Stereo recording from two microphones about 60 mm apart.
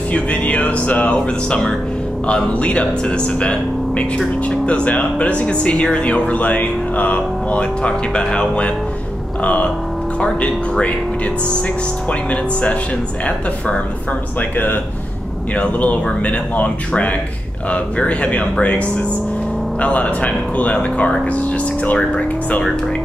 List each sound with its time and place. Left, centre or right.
0.1 s speech: left
12.1 s speech: left
15.5 s speech: left